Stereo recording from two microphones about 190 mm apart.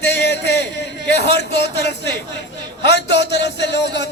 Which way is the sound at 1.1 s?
65° left (ahead or behind).